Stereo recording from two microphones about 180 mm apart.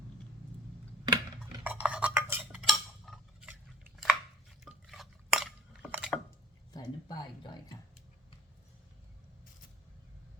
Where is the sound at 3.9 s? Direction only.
Centre (ahead or behind).